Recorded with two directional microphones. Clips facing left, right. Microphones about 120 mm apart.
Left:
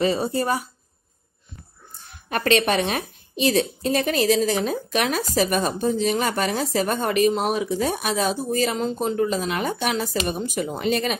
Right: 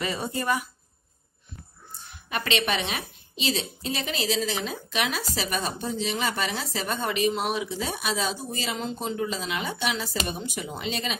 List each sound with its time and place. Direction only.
0.0 s speech: 30° left (ahead or behind)
2.2 s speech: 45° left (ahead or behind)